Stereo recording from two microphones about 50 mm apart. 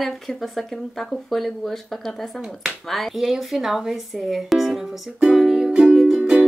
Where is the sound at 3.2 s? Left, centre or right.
Centre.